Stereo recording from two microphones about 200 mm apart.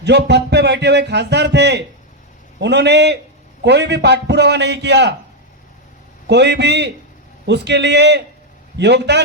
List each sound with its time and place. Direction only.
0.0 s speech: 55° right (ahead or behind)
6.2 s speech: 60° right (ahead or behind)